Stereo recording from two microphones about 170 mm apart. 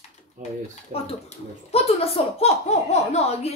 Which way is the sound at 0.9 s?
35° left (ahead or behind).